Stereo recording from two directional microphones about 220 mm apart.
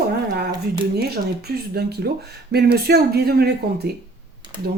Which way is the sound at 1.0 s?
45° right (ahead or behind).